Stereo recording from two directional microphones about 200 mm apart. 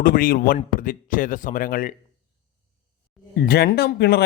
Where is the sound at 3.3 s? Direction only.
50° left (ahead or behind).